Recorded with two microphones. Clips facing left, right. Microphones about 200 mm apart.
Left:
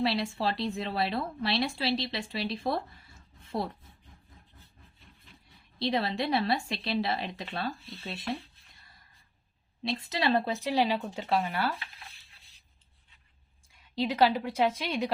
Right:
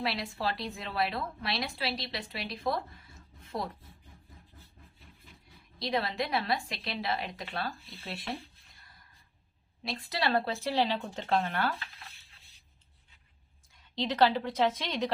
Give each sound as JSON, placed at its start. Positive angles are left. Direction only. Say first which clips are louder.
{"t": 0.0, "sound": "a woman's voice", "louder": "left 4 dB", "side_deg": 30}
{"t": 5.8, "sound": "a woman's voice", "louder": "left 3 dB", "side_deg": 30}
{"t": 9.8, "sound": "speech", "louder": "left 3 dB", "side_deg": 20}
{"t": 13.7, "sound": "speech", "louder": "left 1 dB", "side_deg": 10}